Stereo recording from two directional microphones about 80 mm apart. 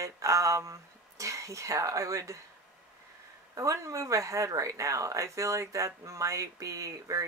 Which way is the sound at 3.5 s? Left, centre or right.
Right.